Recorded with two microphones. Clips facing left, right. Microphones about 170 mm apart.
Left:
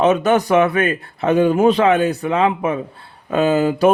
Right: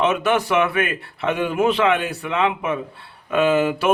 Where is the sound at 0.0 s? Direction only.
40° left (ahead or behind).